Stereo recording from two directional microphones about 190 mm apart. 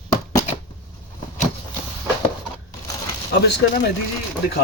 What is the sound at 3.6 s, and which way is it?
Speech, 65° left (ahead or behind).